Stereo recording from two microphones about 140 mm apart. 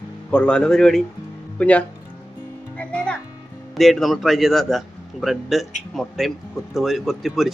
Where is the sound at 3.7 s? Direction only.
Centre (ahead or behind).